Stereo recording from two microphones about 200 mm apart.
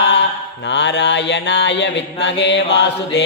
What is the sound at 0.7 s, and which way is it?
Mantra, 60° left (ahead or behind).